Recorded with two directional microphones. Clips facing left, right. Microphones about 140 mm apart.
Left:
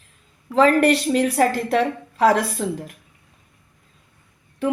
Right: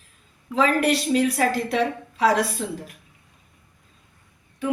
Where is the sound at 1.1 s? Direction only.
50° left (ahead or behind).